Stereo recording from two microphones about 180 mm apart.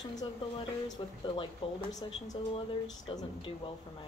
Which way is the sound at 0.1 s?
20° left (ahead or behind).